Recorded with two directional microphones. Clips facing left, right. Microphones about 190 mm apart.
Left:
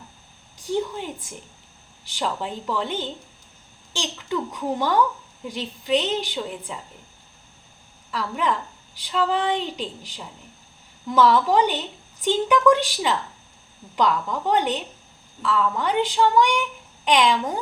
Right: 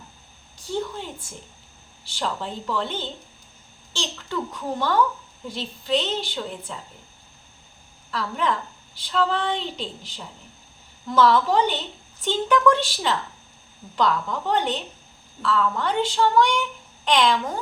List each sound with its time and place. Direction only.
0.6 s a woman's voice: 15° left (ahead or behind)
8.1 s a woman's voice: 10° left (ahead or behind)